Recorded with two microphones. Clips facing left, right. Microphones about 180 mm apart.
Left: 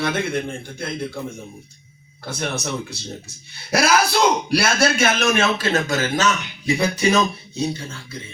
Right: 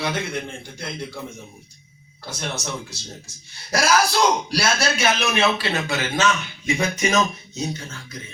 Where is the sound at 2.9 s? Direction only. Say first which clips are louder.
Left 5 dB; 60° left (ahead or behind).